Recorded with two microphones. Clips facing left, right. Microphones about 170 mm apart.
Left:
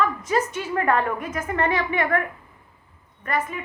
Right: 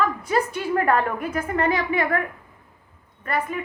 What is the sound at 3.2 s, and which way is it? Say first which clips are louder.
Speech: right 1 dB; 35° right (ahead or behind).